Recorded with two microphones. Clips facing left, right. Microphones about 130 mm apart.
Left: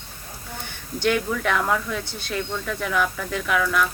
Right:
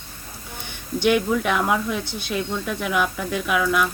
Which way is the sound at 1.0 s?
15° right (ahead or behind).